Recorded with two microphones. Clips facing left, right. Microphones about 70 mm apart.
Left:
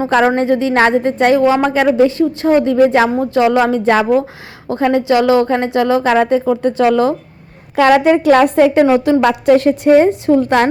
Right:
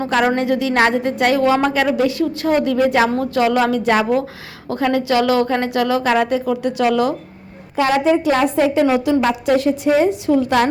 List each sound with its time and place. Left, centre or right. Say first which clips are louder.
0.3 s a woman's voice: left 4 dB; left
7.8 s a woman's voice: left 5 dB; left
8.8 s a woman's voice: left 5 dB; left
9.2 s a woman's voice: left 5 dB; left